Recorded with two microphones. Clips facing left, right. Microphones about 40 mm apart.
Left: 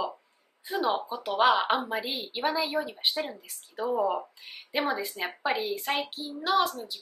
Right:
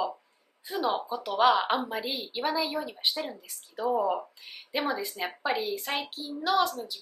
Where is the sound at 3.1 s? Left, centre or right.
Left.